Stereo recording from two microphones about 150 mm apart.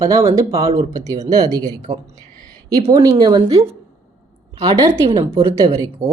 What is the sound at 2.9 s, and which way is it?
A woman's voice, 25° right (ahead or behind).